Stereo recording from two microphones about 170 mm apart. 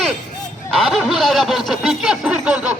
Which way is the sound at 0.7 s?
Centre (ahead or behind).